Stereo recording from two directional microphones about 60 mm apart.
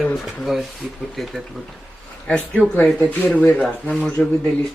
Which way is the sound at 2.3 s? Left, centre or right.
Centre.